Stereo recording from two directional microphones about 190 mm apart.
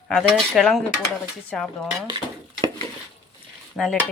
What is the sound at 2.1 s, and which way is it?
Stir, 20° right (ahead or behind).